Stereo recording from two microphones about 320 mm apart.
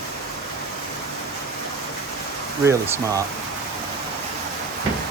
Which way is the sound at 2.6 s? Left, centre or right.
Centre.